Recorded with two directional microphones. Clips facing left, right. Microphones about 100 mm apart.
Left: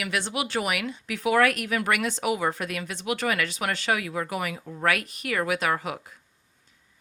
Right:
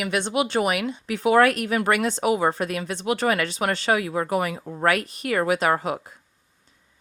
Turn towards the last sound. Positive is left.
turn(degrees=-35)  # may be behind; listen again after turning